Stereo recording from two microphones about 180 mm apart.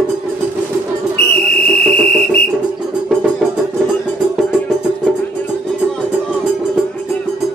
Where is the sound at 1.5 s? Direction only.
60° left (ahead or behind).